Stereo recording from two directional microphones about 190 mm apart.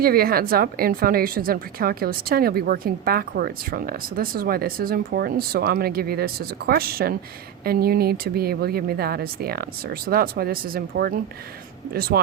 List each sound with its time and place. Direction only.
0.0 s a woman's voice: 50° right (ahead or behind)